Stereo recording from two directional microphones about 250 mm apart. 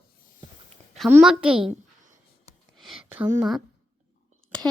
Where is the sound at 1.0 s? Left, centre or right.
Centre.